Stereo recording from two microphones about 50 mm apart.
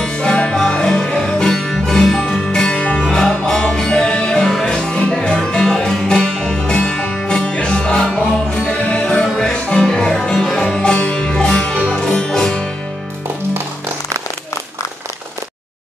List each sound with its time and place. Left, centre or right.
0.0 s music: centre
7.2 s music: centre
10.8 s music: left